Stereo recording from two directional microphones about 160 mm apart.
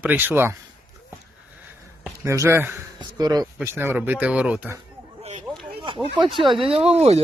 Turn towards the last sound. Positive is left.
turn(degrees=-40)  # may be behind; listen again after turning